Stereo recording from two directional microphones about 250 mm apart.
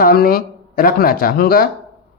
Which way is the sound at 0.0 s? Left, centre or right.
Left.